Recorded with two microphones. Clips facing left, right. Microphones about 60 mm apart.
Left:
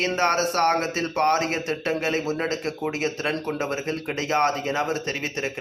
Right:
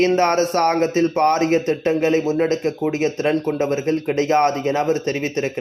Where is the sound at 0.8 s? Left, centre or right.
Right.